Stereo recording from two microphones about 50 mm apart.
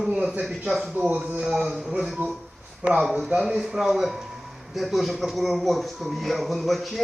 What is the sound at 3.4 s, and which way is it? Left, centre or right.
A man's voice, centre.